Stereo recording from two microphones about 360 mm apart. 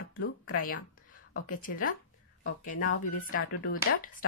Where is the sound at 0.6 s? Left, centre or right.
Left.